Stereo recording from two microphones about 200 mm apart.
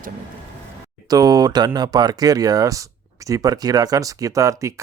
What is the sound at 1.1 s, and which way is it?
Speech, 20° right (ahead or behind).